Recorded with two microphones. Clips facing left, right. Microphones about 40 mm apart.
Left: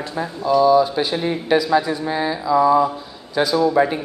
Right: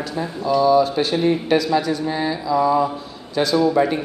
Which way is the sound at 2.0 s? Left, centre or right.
Centre.